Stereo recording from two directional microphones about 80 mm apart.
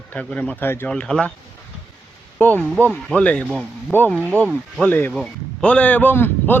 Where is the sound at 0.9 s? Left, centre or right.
Centre.